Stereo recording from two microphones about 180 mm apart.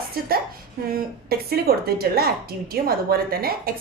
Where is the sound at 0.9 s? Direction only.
55° right (ahead or behind).